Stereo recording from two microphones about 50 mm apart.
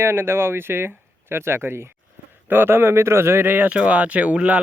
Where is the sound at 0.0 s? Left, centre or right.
Right.